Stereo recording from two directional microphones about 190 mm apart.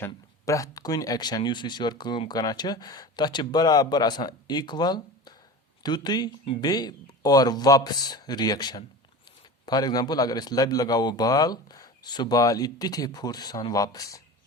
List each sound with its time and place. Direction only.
0.0 s speech: 15° left (ahead or behind)